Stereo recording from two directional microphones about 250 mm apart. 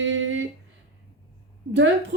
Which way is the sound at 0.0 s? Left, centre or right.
Right.